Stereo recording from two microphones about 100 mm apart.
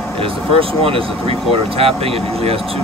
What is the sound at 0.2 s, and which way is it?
Speech, 65° right (ahead or behind).